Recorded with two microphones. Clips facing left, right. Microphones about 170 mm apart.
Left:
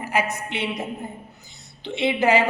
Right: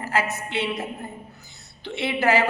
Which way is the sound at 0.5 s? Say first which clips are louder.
Right 2 dB; 15° left (ahead or behind).